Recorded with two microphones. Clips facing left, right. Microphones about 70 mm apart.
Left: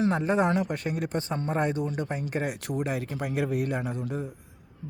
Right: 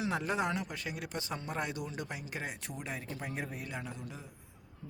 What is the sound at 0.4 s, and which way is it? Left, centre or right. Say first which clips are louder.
A man's voice: left 9 dB; left.